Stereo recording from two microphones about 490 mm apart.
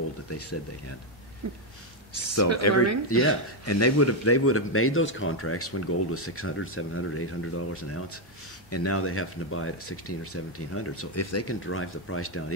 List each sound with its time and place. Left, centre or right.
0.3 s speech: left
2.1 s speech: left
2.7 s speech: right
3.1 s speech: left